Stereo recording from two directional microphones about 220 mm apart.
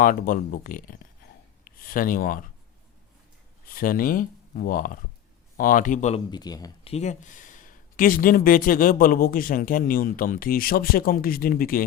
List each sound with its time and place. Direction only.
0.0 s speech: 40° left (ahead or behind)
3.7 s speech: 40° left (ahead or behind)
6.3 s speech: 15° left (ahead or behind)
6.9 s speech: 30° left (ahead or behind)